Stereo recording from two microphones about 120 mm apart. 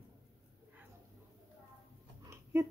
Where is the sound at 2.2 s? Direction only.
25° right (ahead or behind).